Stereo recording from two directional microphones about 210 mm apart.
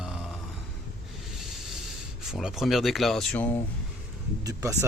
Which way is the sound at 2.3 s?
Centre (ahead or behind).